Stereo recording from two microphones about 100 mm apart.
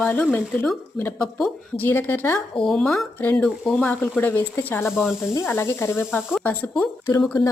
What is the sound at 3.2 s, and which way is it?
Speech, 20° left (ahead or behind).